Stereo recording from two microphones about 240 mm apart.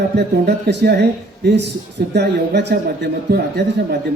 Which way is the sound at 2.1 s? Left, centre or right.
Right.